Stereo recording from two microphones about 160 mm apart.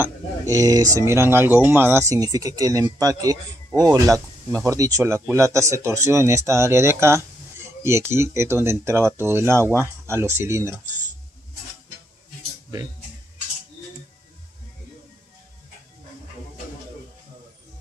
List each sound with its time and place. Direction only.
0.0 s speech: 20° right (ahead or behind)